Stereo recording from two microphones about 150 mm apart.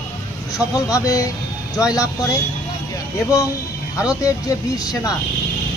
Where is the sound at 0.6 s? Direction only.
25° left (ahead or behind).